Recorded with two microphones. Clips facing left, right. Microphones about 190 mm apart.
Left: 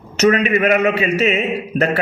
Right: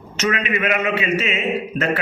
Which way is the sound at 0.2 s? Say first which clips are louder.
Left 7 dB; 40° left (ahead or behind).